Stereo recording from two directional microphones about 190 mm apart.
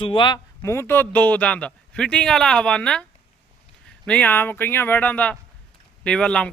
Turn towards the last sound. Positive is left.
turn(degrees=5)  # may be behind; listen again after turning